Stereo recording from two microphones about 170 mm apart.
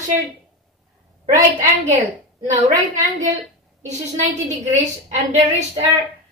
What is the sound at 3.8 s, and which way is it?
A woman's voice, 45° right (ahead or behind).